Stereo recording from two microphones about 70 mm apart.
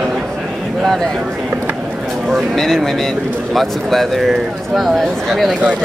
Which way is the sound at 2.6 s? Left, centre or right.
Centre.